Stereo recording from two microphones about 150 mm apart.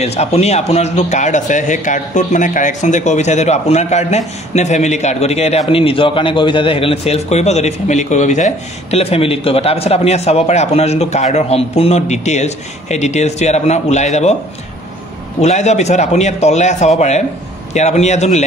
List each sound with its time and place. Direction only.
0.0 s a man's voice: 45° left (ahead or behind)
15.4 s a man's voice: 50° left (ahead or behind)